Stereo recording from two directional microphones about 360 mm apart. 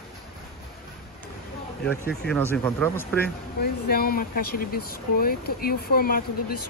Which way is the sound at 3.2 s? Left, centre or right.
Left.